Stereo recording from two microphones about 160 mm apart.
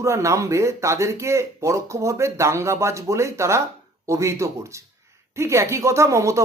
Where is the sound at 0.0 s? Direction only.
20° right (ahead or behind).